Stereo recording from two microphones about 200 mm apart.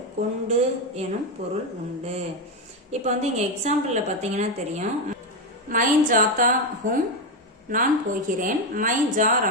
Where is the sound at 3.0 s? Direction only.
35° right (ahead or behind).